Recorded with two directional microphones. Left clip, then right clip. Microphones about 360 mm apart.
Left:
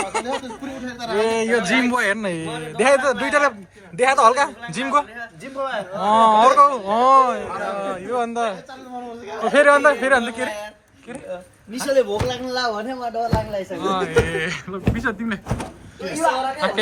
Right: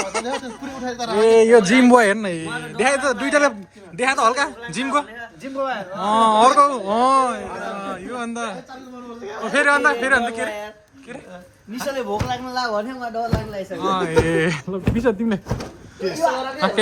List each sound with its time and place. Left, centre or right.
0.0 s a man's voice: centre
11.8 s a man's voice: centre
13.8 s speech: centre
14.8 s a man's voice: centre
16.6 s speech: centre